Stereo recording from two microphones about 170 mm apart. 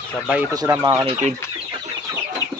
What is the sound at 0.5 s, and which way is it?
Speech, 15° right (ahead or behind).